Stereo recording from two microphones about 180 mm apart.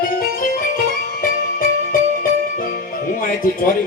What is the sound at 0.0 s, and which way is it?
Music, 50° left (ahead or behind).